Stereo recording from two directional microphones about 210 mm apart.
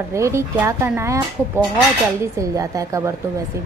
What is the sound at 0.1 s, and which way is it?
A woman's voice, 15° right (ahead or behind).